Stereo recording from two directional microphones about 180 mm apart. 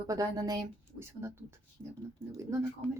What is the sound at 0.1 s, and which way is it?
Speech, 20° right (ahead or behind).